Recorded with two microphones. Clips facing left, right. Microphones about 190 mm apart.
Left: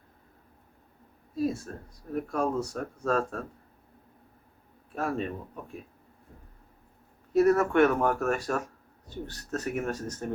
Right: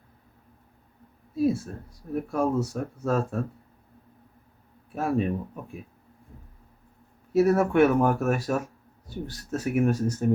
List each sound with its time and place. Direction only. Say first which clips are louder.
1.4 s speech: right 5 dB; 5° right (ahead or behind)
4.9 s speech: right 5 dB; 5° right (ahead or behind)
7.3 s speech: right 1 dB; 10° right (ahead or behind)